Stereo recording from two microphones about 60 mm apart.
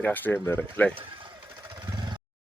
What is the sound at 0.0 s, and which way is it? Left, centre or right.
Speech, left.